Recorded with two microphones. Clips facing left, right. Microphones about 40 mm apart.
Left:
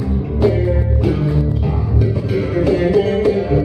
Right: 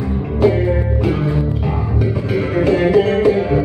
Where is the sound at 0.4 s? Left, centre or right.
Centre.